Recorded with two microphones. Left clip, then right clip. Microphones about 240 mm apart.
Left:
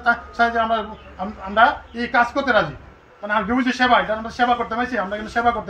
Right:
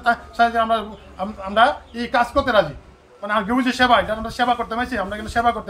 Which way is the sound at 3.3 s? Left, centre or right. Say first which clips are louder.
Even; centre.